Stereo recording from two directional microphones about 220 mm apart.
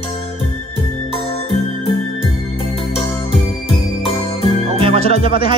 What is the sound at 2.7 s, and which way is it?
Music, 25° left (ahead or behind).